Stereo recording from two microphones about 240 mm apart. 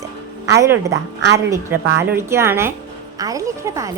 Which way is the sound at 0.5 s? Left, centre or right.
Centre.